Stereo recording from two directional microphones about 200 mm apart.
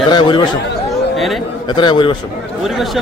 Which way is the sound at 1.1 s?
Centre (ahead or behind).